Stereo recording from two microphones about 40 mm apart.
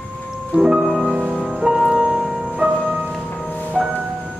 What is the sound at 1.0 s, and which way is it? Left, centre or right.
Music, right.